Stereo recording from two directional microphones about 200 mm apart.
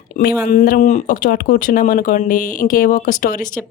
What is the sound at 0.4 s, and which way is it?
Speech, 45° left (ahead or behind).